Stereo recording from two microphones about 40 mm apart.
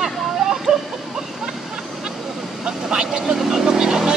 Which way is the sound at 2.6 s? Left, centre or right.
Right.